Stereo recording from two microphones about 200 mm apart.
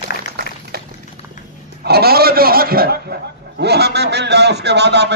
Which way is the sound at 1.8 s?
50° right (ahead or behind).